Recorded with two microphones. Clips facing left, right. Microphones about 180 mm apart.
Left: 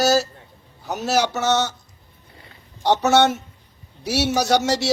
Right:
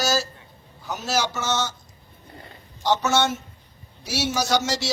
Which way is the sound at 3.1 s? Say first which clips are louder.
Left 6 dB; 65° left (ahead or behind).